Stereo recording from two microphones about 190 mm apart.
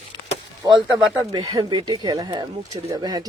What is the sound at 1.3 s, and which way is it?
Speech, 20° right (ahead or behind).